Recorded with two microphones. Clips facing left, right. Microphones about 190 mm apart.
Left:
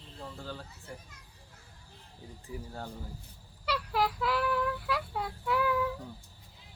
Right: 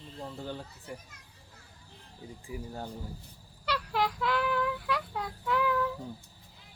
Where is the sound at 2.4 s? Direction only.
15° right (ahead or behind).